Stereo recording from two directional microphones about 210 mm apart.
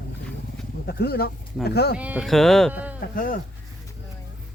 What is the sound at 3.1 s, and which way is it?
Speech, 45° left (ahead or behind).